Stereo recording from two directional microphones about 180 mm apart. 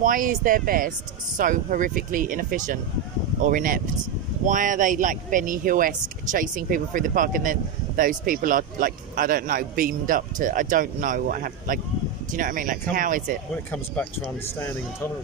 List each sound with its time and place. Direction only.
0.0 s speech: 45° right (ahead or behind)